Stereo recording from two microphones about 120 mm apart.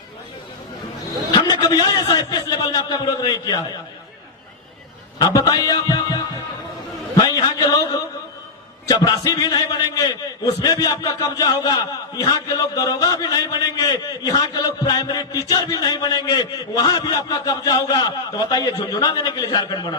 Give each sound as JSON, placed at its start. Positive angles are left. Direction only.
{"t": 1.3, "sound": "a man's voice", "side_deg": 35}
{"t": 5.2, "sound": "a man's voice", "side_deg": 30}
{"t": 7.2, "sound": "a sound", "side_deg": 35}
{"t": 8.9, "sound": "a man's voice", "side_deg": 30}